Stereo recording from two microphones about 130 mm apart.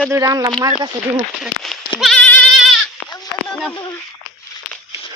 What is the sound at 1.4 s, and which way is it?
Speech, centre (ahead or behind).